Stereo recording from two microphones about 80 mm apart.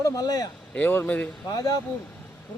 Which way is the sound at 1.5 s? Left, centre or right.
Left.